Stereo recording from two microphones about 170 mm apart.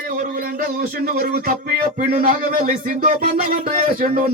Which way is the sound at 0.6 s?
60° right (ahead or behind).